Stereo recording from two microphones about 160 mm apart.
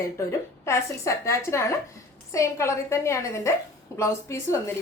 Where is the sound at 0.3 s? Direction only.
20° left (ahead or behind).